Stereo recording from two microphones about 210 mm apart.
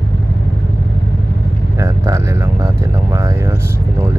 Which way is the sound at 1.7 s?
15° right (ahead or behind).